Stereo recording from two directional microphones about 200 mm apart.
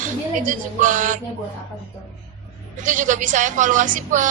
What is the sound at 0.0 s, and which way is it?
Speech, 40° right (ahead or behind).